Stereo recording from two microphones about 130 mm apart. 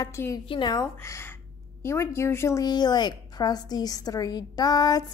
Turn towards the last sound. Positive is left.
turn(degrees=30)  # may be behind; listen again after turning